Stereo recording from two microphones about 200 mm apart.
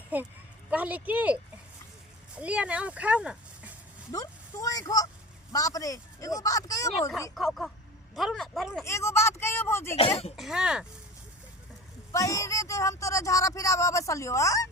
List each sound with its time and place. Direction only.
0.1 s speech: 10° right (ahead or behind)
2.4 s speech: 5° right (ahead or behind)
4.1 s speech: 15° left (ahead or behind)
7.3 s speech: centre (ahead or behind)
8.8 s speech: 15° left (ahead or behind)
10.3 s speech: centre (ahead or behind)
12.1 s speech: 15° left (ahead or behind)